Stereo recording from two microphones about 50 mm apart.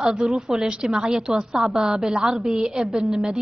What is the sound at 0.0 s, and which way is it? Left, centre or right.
A woman's voice, centre.